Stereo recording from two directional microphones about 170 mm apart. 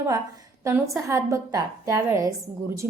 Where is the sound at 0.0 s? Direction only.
20° right (ahead or behind).